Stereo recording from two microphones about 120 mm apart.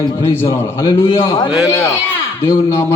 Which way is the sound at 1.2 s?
40° left (ahead or behind).